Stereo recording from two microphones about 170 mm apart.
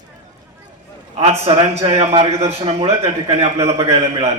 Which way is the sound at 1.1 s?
35° right (ahead or behind).